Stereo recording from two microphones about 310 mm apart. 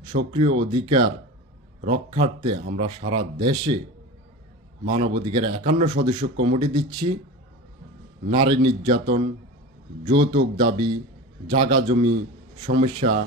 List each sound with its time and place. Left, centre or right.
0.1 s speech: right
0.6 s speech: centre
4.8 s speech: centre
8.3 s speech: centre